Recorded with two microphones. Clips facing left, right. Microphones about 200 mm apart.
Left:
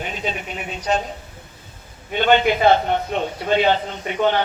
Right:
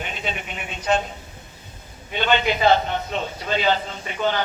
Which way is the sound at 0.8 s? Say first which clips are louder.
Even; 40° left (ahead or behind).